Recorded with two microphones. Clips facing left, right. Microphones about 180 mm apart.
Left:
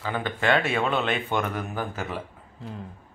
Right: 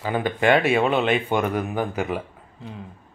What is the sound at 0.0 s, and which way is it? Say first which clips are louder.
Speech: right 5 dB; 15° right (ahead or behind).